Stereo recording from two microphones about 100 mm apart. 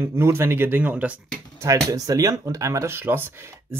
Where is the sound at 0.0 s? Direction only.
25° right (ahead or behind).